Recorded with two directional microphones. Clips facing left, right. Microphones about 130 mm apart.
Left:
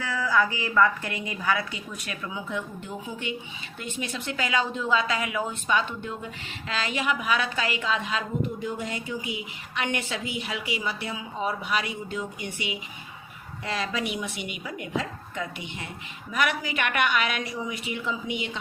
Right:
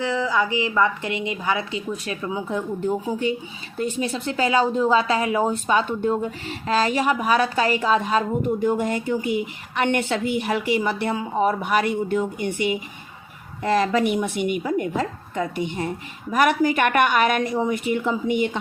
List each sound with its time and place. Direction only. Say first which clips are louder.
0.0 s a woman's voice: right 3 dB; 20° right (ahead or behind); by 18.6 s 50° right (ahead or behind)